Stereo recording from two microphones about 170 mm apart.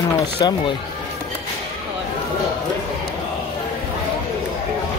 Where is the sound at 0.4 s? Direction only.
25° left (ahead or behind).